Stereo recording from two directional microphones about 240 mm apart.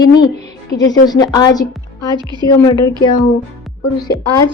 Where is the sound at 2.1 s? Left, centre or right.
Centre.